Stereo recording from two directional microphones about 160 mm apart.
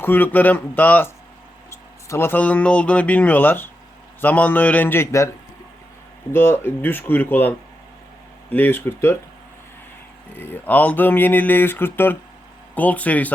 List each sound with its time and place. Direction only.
0.0 s speech: 10° left (ahead or behind)
6.3 s speech: 15° left (ahead or behind)
10.3 s speech: 15° left (ahead or behind)